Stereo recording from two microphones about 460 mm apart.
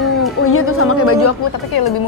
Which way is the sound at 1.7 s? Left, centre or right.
Left.